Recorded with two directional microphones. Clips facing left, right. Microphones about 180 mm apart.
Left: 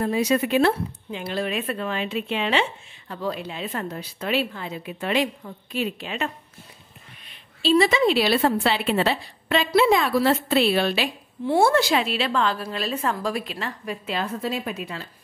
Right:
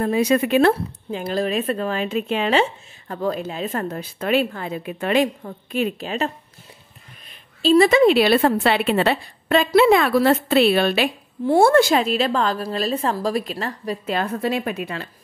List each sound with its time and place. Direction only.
0.0 s a woman's voice: 55° right (ahead or behind)
14.2 s speech: 60° right (ahead or behind)